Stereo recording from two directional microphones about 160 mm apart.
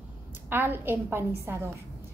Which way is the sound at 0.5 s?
15° right (ahead or behind).